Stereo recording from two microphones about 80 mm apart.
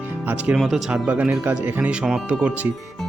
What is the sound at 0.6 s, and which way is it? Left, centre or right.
Speech, centre.